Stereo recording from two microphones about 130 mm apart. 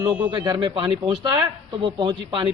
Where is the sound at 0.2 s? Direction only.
30° right (ahead or behind).